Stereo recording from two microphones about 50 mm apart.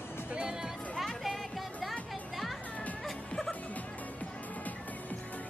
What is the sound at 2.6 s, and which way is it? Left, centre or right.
Music, left.